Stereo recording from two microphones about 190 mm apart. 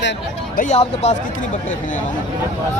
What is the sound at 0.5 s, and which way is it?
Speech, 35° left (ahead or behind).